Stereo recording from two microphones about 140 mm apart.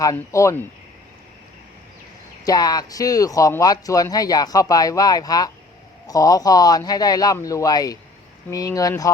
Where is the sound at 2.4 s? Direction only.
25° left (ahead or behind).